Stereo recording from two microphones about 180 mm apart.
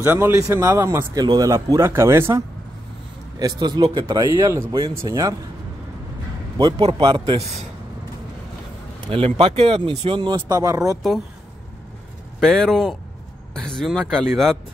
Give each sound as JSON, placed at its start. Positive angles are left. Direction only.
{"t": 0.0, "sound": "speech", "side_deg": -10}
{"t": 6.6, "sound": "speech", "side_deg": -30}
{"t": 9.1, "sound": "speech", "side_deg": -30}
{"t": 12.4, "sound": "speech", "side_deg": 5}